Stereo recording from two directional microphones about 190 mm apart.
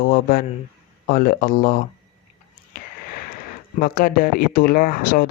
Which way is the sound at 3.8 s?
50° left (ahead or behind).